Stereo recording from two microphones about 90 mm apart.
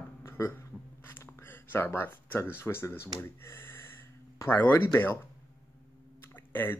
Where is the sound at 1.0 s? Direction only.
25° left (ahead or behind).